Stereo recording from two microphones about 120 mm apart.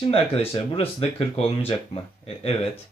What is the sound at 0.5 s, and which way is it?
Speech, 50° left (ahead or behind).